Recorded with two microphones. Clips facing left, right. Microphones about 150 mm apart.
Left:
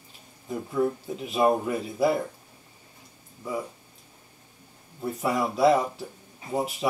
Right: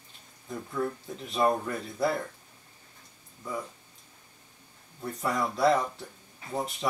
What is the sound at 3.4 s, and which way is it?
Speech, 15° left (ahead or behind).